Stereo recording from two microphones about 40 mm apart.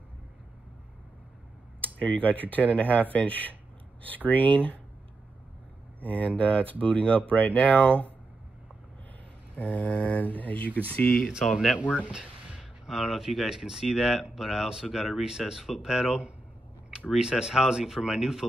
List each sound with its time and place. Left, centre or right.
1.8 s speech: left
6.0 s speech: left
9.6 s speech: left
11.4 s speech: centre
12.5 s speech: centre